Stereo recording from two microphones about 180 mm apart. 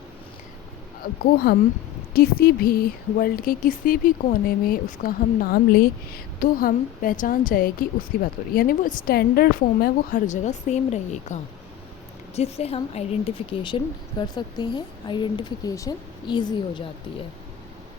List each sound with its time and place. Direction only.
1.5 s a woman's voice: 65° left (ahead or behind); by 11.3 s 40° left (ahead or behind)
12.4 s speech: 35° left (ahead or behind)